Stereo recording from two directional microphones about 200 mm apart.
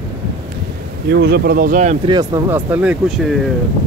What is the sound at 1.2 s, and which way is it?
Speech, 50° right (ahead or behind).